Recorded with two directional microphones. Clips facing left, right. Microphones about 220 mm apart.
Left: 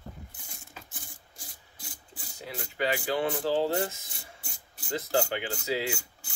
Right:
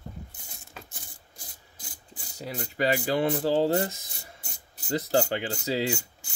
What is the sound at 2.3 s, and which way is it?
Rub, 40° right (ahead or behind).